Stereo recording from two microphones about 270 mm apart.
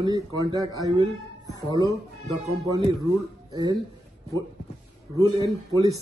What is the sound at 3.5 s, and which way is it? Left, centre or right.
Speech, centre.